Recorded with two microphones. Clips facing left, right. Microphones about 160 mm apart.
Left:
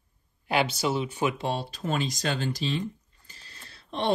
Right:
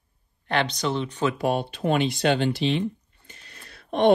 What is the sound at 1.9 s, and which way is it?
Speech, 40° left (ahead or behind).